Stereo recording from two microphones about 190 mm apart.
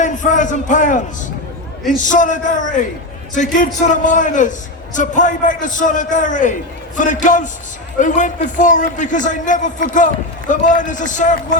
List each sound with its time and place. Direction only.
0.0 s a man's voice: 40° left (ahead or behind)
2.0 s a man's voice: 40° left (ahead or behind)